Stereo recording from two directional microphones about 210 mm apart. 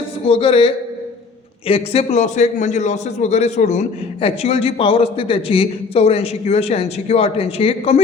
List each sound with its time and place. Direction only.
0.3 s a man's voice: 25° left (ahead or behind)